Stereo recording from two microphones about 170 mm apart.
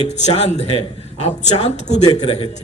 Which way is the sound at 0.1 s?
40° left (ahead or behind).